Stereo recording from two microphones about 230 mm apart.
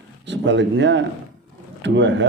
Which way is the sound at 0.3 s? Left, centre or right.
Right.